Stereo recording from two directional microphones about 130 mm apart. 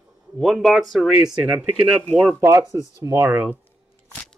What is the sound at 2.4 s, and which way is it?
Speech, 25° right (ahead or behind).